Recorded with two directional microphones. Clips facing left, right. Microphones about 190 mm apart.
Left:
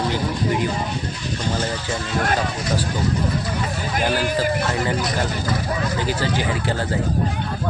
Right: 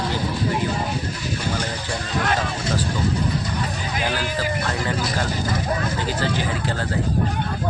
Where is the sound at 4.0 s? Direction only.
50° left (ahead or behind).